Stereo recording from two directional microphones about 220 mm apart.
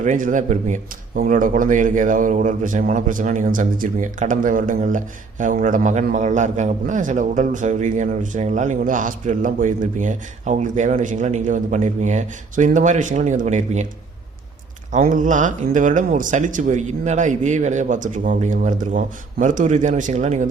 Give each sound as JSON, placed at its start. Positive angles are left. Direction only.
{"t": 0.0, "sound": "speech", "side_deg": -35}
{"t": 14.9, "sound": "speech", "side_deg": -35}